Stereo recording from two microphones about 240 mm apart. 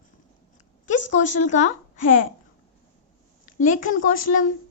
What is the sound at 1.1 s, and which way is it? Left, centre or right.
Speech, left.